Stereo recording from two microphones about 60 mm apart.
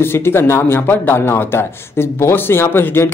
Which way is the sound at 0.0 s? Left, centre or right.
Left.